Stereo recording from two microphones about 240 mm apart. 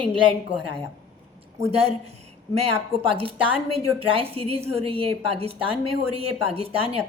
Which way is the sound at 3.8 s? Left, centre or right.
Right.